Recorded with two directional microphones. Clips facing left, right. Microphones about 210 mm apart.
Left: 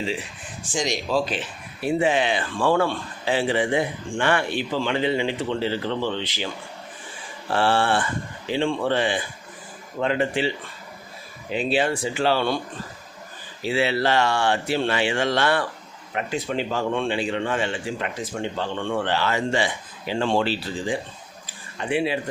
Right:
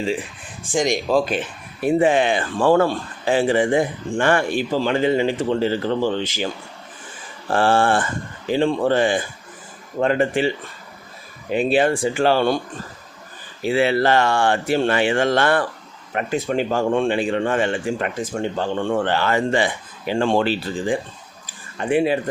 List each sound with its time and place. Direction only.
0.0 s speech: 45° right (ahead or behind)
7.5 s speech: 45° right (ahead or behind)
11.5 s speech: 50° right (ahead or behind)
13.6 s speech: 50° right (ahead or behind)